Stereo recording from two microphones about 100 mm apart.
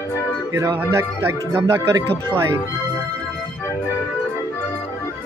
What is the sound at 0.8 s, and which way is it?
Speech, 25° right (ahead or behind).